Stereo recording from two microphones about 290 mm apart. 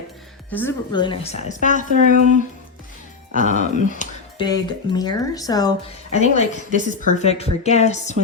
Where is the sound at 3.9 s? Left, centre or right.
Left.